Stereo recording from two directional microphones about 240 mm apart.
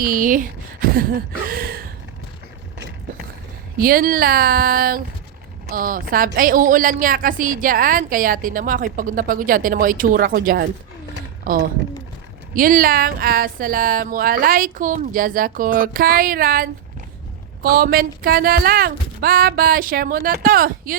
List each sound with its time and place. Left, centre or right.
0.0 s a woman's voice: right
1.5 s a sound: right
3.8 s a woman's voice: right